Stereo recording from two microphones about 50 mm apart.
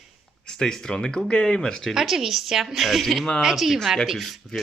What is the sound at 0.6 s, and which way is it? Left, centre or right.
Speech, centre.